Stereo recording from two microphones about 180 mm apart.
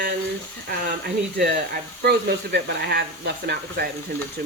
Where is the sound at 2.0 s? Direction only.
65° right (ahead or behind).